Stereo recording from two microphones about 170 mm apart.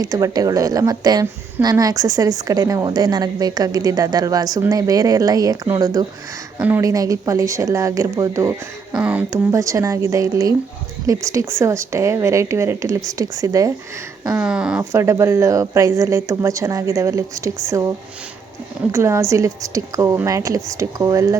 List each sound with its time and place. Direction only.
0.0 s a woman's voice: 20° right (ahead or behind)
14.3 s a woman's voice: 5° right (ahead or behind)